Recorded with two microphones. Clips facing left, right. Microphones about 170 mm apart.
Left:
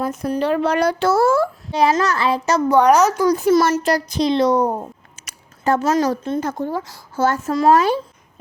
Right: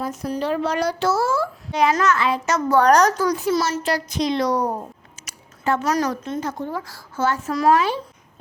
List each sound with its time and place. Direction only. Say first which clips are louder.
0.0 s speech: left 4 dB; 55° left (ahead or behind)
1.7 s speech: left 1 dB; 35° left (ahead or behind)
2.6 s a child's voice: left 1 dB; 15° left (ahead or behind)
3.3 s speech: left 6 dB; 50° left (ahead or behind); by 4.9 s 25° left (ahead or behind)
5.2 s a sound: even; 50° left (ahead or behind)
5.8 s a woman's voice: left 4 dB; 30° left (ahead or behind)
6.4 s a child's voice: left 4 dB; 50° left (ahead or behind)